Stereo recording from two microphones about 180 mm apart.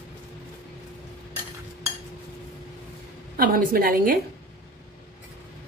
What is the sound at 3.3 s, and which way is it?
Speech, 55° right (ahead or behind).